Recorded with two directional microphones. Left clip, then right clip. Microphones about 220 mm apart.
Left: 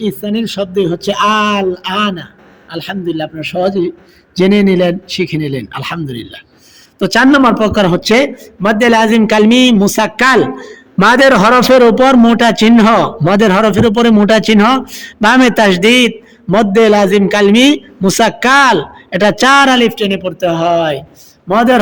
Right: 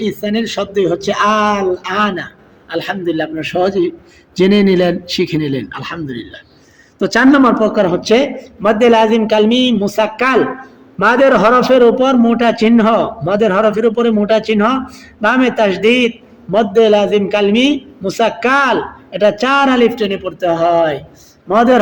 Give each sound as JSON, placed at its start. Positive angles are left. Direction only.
{"t": 0.0, "sound": "a man's voice", "side_deg": 30}